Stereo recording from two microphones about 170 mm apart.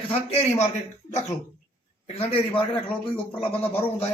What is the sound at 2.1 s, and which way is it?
Speech, 35° left (ahead or behind).